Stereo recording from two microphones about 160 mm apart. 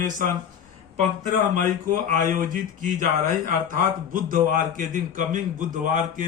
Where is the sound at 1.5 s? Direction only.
55° right (ahead or behind).